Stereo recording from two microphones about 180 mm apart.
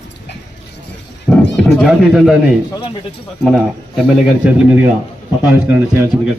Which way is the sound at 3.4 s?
Centre (ahead or behind).